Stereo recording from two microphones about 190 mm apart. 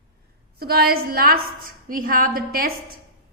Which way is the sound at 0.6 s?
55° right (ahead or behind).